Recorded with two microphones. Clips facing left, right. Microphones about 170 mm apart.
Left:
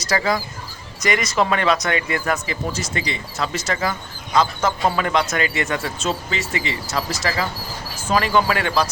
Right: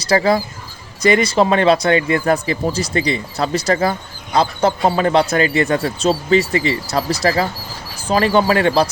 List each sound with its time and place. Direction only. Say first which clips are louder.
0.0 s speech: right 6 dB; 30° right (ahead or behind)